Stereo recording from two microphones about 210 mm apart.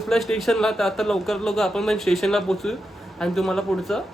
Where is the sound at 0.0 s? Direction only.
Centre (ahead or behind).